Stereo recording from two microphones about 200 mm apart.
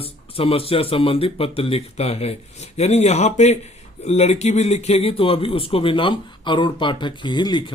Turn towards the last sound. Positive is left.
turn(degrees=20)  # may be behind; listen again after turning